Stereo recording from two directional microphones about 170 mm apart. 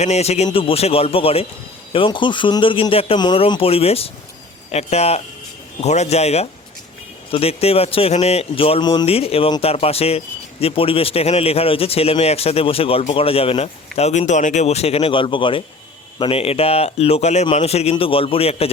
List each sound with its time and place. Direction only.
0.0 s a man's voice: 40° left (ahead or behind)